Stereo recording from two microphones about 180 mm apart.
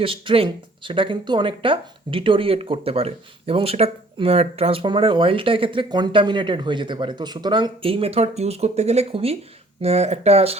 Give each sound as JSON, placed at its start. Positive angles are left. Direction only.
{"t": 0.0, "sound": "speech", "side_deg": -30}